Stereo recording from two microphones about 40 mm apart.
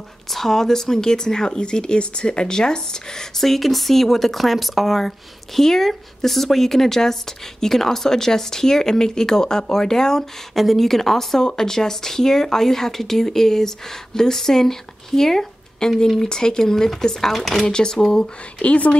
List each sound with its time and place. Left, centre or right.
0.3 s speech: centre
10.5 s speech: centre
17.6 s speech: centre
18.2 s speech: left